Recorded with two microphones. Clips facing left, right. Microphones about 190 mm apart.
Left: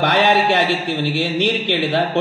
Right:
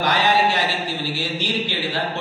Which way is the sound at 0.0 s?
65° left (ahead or behind).